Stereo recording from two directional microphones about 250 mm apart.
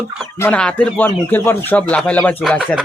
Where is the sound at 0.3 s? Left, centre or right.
Centre.